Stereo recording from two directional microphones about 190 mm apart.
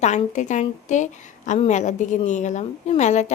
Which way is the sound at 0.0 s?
40° left (ahead or behind).